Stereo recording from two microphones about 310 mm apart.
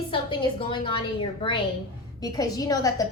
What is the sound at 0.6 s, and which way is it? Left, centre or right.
A woman's voice, centre.